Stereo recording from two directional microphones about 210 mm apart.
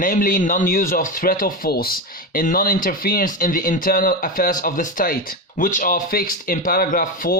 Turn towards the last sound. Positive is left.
turn(degrees=40)  # may be behind; listen again after turning